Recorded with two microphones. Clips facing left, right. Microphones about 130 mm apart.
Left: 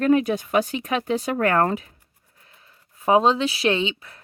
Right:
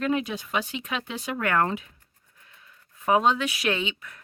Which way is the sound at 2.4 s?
30° left (ahead or behind).